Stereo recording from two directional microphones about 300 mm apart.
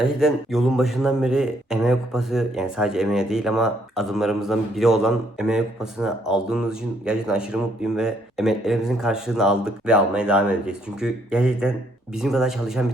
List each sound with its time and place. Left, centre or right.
0.0 s speech: centre